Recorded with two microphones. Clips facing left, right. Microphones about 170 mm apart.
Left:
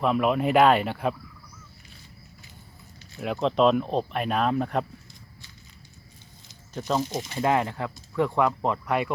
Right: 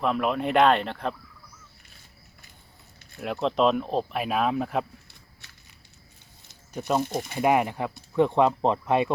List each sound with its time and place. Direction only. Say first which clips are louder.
0.0 s speech: left 2 dB; centre (ahead or behind)
3.2 s speech: left 1 dB; centre (ahead or behind)
6.7 s speech: right 1 dB; 10° right (ahead or behind)
7.0 s speech: right 1 dB; 55° right (ahead or behind)
7.3 s speech: right 2 dB; 15° right (ahead or behind)